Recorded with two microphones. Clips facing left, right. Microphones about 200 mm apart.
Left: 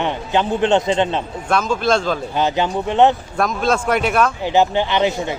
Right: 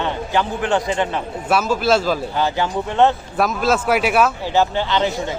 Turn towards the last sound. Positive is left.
turn(degrees=15)  # may be behind; listen again after turning